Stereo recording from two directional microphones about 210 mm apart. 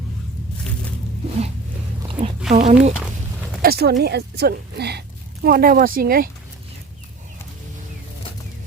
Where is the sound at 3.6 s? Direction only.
50° right (ahead or behind).